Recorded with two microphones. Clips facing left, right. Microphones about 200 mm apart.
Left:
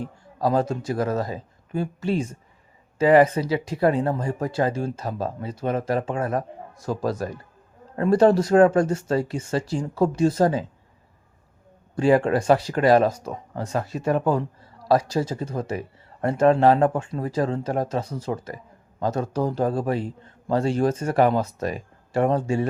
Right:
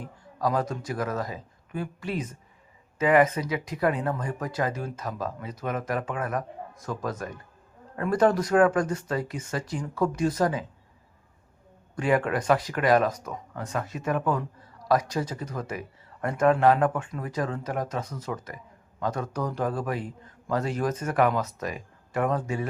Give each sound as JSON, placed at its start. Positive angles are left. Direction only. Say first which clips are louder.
{"t": 0.0, "sound": "speech", "louder": "left 4 dB", "side_deg": 30}
{"t": 11.9, "sound": "speech", "louder": "left 6 dB", "side_deg": 30}